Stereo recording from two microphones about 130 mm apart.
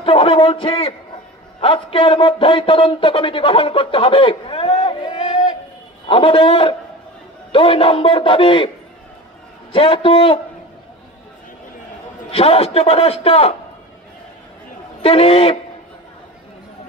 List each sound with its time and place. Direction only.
0.0 s a man's voice: 45° left (ahead or behind)
9.7 s a man's voice: 45° left (ahead or behind)
12.3 s a man's voice: 50° left (ahead or behind)
15.0 s a man's voice: 45° left (ahead or behind)